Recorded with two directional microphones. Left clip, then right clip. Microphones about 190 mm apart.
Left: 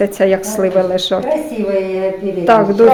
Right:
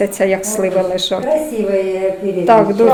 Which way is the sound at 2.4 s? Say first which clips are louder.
Even; 25° left (ahead or behind).